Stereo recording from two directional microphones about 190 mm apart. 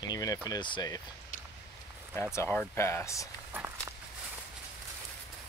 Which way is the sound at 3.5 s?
10° right (ahead or behind).